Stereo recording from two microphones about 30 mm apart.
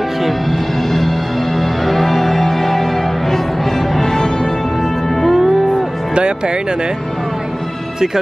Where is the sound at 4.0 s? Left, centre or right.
Centre.